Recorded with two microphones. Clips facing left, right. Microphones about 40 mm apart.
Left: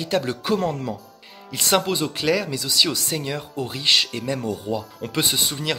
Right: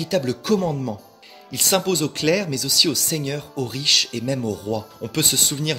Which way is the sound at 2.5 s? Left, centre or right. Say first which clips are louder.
Right 1 dB; left.